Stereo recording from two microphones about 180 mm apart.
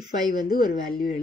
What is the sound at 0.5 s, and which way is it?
Speech, 50° left (ahead or behind).